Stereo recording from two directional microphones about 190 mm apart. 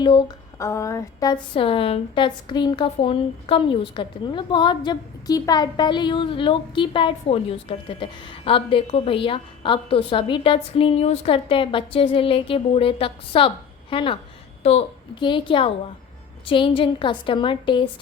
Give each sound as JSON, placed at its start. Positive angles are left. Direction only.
{"t": 0.0, "sound": "speech", "side_deg": 25}